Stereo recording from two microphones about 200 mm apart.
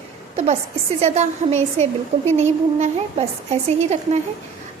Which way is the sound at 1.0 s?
30° right (ahead or behind).